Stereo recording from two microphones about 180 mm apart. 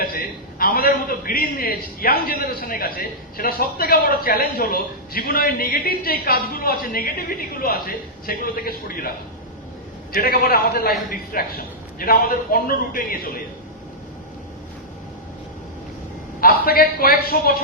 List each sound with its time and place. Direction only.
0.0 s a man's voice: 55° left (ahead or behind)
10.2 s a man's voice: 55° left (ahead or behind)
16.4 s a man's voice: 55° left (ahead or behind)